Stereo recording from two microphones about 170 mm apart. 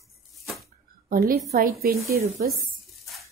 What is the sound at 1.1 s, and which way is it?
A woman's voice, 60° right (ahead or behind).